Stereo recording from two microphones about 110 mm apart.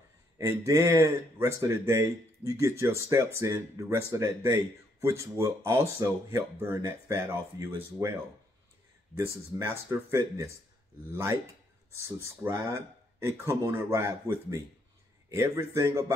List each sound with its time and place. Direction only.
0.4 s speech: 30° right (ahead or behind)
9.6 s speech: 25° right (ahead or behind)
11.9 s speech: 25° right (ahead or behind)